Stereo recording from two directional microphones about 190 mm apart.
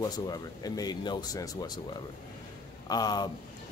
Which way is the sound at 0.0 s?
20° left (ahead or behind).